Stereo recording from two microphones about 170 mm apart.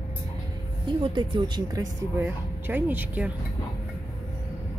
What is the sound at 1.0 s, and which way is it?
Speech, 25° right (ahead or behind).